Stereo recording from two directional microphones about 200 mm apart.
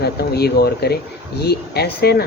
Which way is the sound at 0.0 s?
55° left (ahead or behind).